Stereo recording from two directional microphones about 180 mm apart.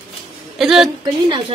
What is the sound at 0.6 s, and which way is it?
Speech, 5° right (ahead or behind).